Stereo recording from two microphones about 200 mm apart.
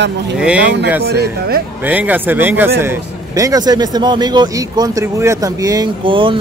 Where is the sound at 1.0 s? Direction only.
55° right (ahead or behind).